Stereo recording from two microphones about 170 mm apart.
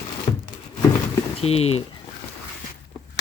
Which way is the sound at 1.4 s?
35° left (ahead or behind).